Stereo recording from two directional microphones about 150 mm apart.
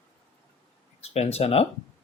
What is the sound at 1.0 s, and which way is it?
Speech, 45° left (ahead or behind).